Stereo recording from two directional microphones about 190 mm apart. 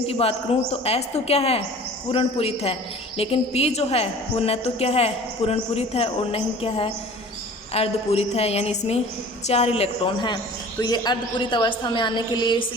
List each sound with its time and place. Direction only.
0.1 s a woman's voice: 30° left (ahead or behind)